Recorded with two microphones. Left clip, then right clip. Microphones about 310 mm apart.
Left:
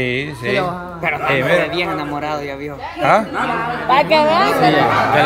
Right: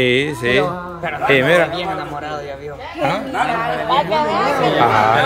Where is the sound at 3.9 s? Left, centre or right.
Left.